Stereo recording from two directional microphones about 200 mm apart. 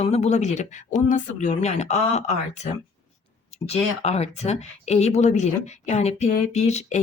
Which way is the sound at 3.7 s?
35° left (ahead or behind).